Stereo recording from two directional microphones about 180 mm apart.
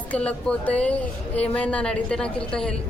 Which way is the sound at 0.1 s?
5° left (ahead or behind).